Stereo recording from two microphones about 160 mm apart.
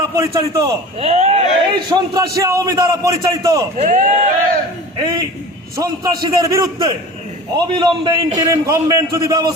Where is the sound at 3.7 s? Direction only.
50° right (ahead or behind).